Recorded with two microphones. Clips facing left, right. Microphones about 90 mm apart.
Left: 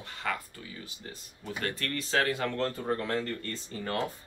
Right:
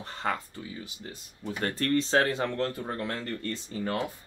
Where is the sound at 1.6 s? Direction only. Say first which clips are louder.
Right 8 dB; 35° right (ahead or behind).